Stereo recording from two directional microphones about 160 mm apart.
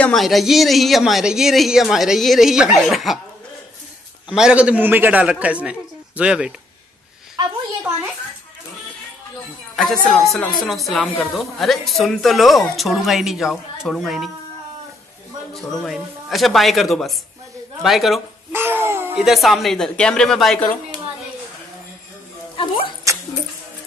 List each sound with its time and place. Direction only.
0.0 s a woman's voice: centre (ahead or behind)
4.3 s a man's voice: 5° right (ahead or behind)
9.8 s a woman's voice: centre (ahead or behind)
15.5 s a woman's voice: centre (ahead or behind)
18.5 s babbling: 15° right (ahead or behind)
19.1 s a woman's voice: centre (ahead or behind)
23.1 s speech: 20° right (ahead or behind)